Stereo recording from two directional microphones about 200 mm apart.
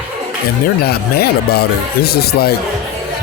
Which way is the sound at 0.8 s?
50° left (ahead or behind).